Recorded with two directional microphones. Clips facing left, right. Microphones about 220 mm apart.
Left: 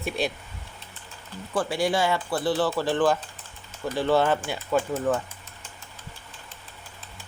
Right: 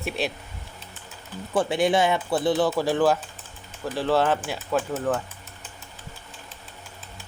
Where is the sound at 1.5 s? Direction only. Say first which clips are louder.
Right 3 dB; 20° right (ahead or behind); by 5.2 s centre (ahead or behind).